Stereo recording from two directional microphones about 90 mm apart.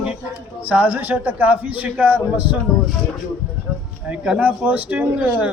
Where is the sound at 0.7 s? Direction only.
20° right (ahead or behind).